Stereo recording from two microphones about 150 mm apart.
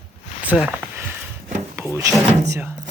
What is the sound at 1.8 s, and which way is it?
Drawer open or close, 15° right (ahead or behind).